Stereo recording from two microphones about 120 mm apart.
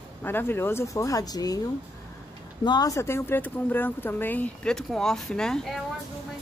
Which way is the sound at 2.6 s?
35° left (ahead or behind).